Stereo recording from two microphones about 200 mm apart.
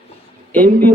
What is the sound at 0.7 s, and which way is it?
Speech, 45° right (ahead or behind).